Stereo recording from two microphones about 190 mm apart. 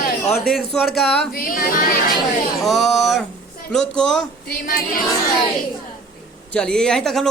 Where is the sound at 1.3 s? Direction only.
50° left (ahead or behind).